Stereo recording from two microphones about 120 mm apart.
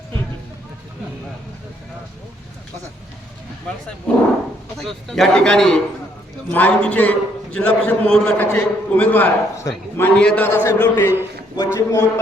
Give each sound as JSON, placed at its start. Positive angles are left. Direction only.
{"t": 4.1, "sound": "a man's voice", "side_deg": 10}